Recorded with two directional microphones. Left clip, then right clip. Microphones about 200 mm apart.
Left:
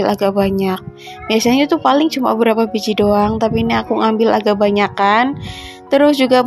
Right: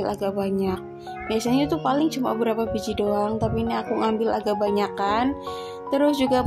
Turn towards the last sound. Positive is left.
turn(degrees=20)  # may be behind; listen again after turning